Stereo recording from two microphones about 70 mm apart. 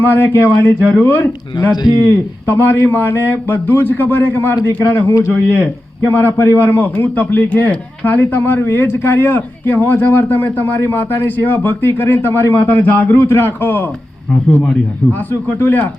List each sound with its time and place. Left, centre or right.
0.0 s a man's voice: left
1.7 s a man's voice: left
2.0 s a man's voice: left
5.0 s speech: left
6.0 s a man's voice: left
15.3 s a man's voice: left